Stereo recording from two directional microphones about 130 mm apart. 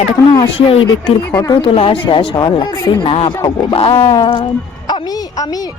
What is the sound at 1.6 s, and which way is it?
A man's voice, 45° left (ahead or behind).